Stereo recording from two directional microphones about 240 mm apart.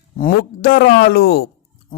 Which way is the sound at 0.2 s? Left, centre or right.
Left.